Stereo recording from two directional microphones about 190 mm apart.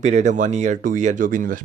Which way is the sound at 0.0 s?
35° right (ahead or behind).